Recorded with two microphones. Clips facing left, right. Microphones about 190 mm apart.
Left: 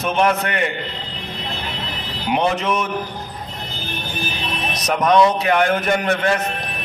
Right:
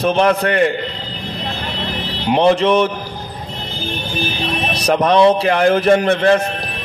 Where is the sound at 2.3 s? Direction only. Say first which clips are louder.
Right 7 dB; 30° right (ahead or behind).